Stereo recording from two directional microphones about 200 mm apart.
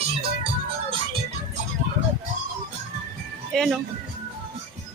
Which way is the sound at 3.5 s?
Centre (ahead or behind).